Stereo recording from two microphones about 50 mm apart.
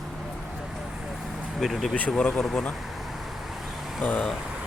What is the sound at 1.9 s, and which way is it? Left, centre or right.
Speech, centre.